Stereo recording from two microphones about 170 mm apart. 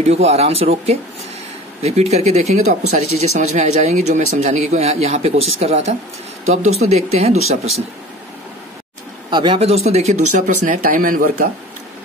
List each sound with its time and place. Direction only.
0.0 s speech: 35° right (ahead or behind)
9.3 s speech: 30° right (ahead or behind); by 11.4 s 55° right (ahead or behind)